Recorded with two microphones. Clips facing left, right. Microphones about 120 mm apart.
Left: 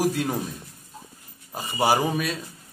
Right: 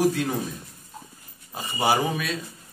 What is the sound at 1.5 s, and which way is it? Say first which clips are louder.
Speech: left 1 dB; 10° left (ahead or behind).